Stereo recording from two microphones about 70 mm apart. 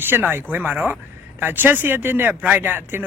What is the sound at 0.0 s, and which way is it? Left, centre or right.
Speech, right.